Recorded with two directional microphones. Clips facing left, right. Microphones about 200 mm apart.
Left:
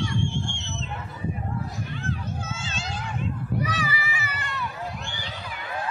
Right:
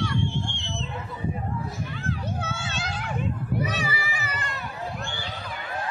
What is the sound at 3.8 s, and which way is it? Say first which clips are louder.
Run: even; 35° right (ahead or behind).